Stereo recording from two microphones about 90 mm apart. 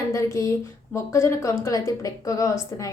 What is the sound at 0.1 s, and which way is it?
A woman's voice, 35° left (ahead or behind).